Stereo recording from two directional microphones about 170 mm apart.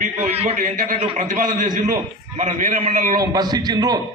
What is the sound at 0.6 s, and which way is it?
A man's voice, 50° right (ahead or behind).